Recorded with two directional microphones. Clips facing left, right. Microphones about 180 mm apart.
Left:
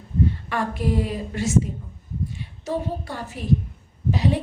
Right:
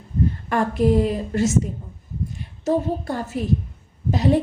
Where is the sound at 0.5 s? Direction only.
45° right (ahead or behind).